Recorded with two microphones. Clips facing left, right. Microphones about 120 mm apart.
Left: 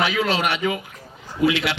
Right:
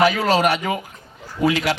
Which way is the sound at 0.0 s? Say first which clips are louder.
Right 5 dB; 40° right (ahead or behind).